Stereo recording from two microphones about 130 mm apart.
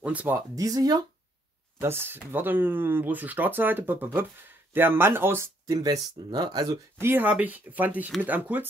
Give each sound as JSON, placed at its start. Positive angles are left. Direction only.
{"t": 0.0, "sound": "speech", "side_deg": -10}
{"t": 0.6, "sound": "speech", "side_deg": -30}
{"t": 1.8, "sound": "speech", "side_deg": -20}
{"t": 5.7, "sound": "speech", "side_deg": -30}
{"t": 7.0, "sound": "speech", "side_deg": -15}